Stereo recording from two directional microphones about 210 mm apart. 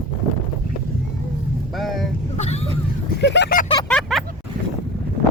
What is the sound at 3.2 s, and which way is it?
Vehicle, 55° left (ahead or behind).